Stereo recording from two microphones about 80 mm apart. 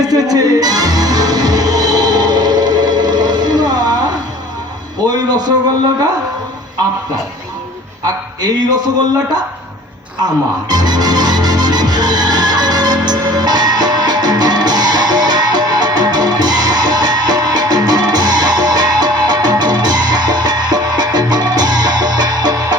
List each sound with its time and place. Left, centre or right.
0.0 s music: right
8.0 s a man's voice: right
10.7 s music: right